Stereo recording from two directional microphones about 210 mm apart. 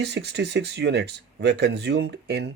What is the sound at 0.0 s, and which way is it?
Speech, 55° right (ahead or behind).